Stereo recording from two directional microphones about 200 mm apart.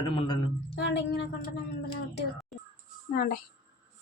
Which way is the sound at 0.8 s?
60° left (ahead or behind).